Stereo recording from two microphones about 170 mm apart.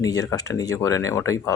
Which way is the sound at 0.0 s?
20° left (ahead or behind).